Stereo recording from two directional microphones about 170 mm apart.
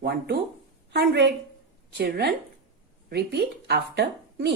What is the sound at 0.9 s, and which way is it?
A woman's voice, 80° right.